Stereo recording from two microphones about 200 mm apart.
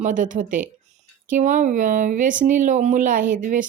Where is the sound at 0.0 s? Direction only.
40° right (ahead or behind).